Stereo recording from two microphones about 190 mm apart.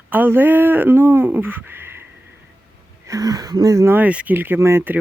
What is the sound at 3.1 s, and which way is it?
Speech, 20° right (ahead or behind).